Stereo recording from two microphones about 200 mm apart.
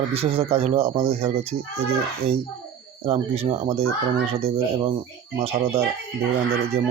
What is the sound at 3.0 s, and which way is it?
Speech, 30° right (ahead or behind).